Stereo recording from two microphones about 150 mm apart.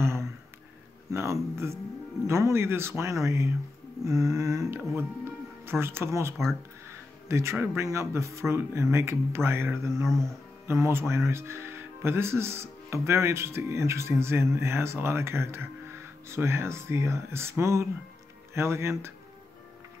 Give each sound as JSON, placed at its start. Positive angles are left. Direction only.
{"t": 1.1, "sound": "speech", "side_deg": -20}